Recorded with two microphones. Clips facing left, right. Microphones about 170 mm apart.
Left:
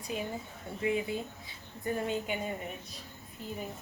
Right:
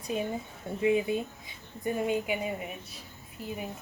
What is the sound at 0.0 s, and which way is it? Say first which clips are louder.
Speech: right 4 dB; 20° right (ahead or behind).